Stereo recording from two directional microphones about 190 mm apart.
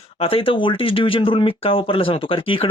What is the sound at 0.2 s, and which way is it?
Speech, 30° left (ahead or behind).